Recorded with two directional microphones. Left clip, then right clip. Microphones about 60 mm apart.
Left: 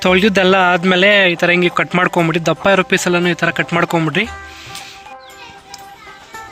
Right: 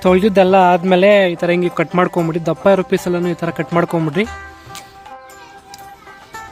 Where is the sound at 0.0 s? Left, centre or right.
Centre.